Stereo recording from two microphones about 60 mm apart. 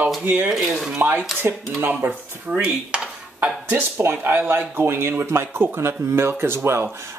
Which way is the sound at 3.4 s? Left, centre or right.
Right.